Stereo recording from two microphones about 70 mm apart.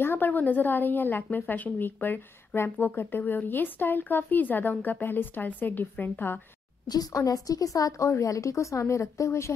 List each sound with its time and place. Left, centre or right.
0.0 s a woman's voice: left
6.9 s a woman's voice: left